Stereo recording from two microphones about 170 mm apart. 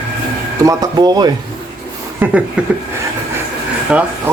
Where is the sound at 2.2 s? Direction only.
5° right (ahead or behind).